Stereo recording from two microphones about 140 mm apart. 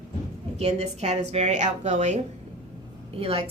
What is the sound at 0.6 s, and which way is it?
A woman's voice, 50° right (ahead or behind).